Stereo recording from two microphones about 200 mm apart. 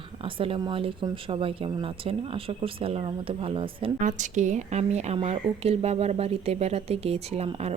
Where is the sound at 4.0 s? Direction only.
40° right (ahead or behind).